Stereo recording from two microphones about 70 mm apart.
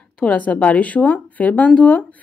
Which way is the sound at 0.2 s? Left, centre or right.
Centre.